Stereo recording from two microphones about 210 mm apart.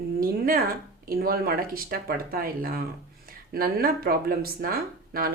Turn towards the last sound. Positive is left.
turn(degrees=-45)  # may be behind; listen again after turning